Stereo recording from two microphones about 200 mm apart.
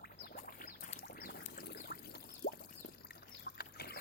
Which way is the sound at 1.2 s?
45° left (ahead or behind).